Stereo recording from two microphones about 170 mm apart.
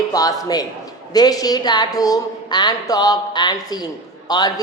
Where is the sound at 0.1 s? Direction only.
20° left (ahead or behind).